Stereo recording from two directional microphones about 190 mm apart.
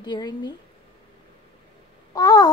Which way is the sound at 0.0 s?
20° left (ahead or behind).